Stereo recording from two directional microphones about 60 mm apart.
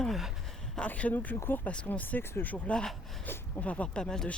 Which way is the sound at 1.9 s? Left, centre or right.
Left.